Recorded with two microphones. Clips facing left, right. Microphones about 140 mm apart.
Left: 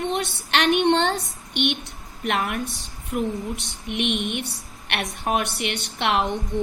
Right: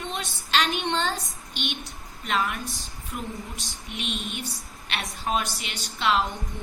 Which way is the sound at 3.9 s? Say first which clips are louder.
Left 9 dB; 65° left (ahead or behind).